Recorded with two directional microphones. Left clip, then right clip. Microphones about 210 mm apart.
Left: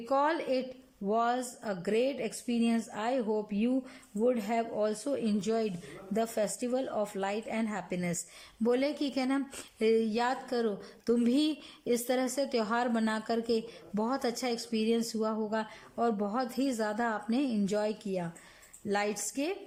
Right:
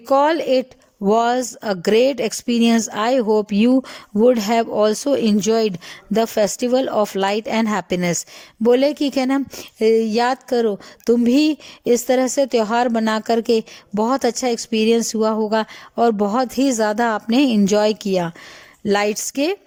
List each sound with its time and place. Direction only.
0.1 s a woman's voice: 40° right (ahead or behind)